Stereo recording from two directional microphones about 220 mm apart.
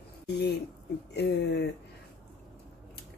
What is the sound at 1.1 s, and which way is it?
Speech, 50° left (ahead or behind).